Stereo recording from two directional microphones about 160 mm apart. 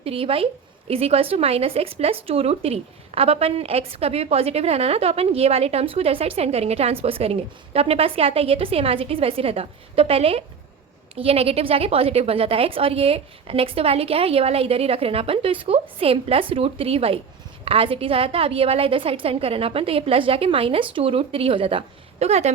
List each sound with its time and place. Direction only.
0.0 s a woman's voice: 35° right (ahead or behind)